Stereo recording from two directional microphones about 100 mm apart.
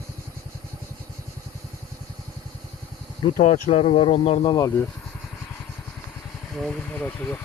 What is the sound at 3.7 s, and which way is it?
Speech, 90° left.